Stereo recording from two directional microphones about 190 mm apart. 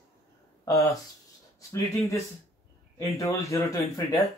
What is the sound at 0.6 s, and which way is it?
Speech, 15° left (ahead or behind).